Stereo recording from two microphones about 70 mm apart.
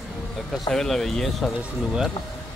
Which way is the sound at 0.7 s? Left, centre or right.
Centre.